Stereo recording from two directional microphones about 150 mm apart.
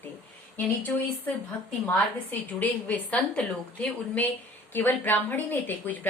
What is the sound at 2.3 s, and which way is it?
A woman's voice, 15° left (ahead or behind).